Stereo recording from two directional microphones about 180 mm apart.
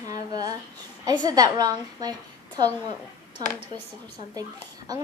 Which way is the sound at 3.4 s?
20° right (ahead or behind).